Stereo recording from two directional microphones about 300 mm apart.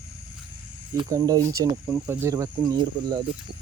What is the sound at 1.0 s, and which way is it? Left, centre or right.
Speech, centre.